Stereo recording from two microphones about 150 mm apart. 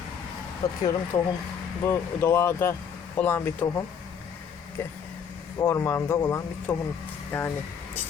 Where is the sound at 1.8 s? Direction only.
15° left (ahead or behind).